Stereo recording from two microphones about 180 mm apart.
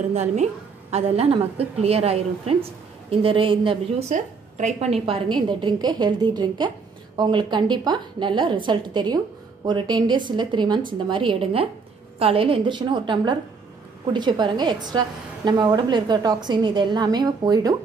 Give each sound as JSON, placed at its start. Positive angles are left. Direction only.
{"t": 0.1, "sound": "a woman's voice", "side_deg": -40}
{"t": 4.1, "sound": "a woman's voice", "side_deg": -40}